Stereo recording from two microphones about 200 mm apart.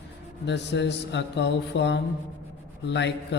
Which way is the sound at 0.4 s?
60° left (ahead or behind).